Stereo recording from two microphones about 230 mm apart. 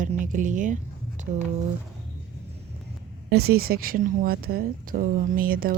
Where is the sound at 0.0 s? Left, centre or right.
Right.